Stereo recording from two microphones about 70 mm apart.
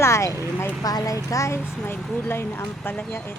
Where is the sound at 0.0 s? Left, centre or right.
Left.